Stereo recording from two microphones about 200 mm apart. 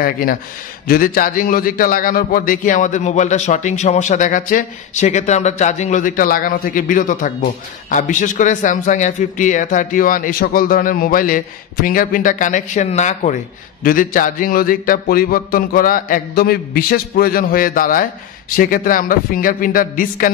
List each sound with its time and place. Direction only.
0.0 s a man's voice: 45° left (ahead or behind)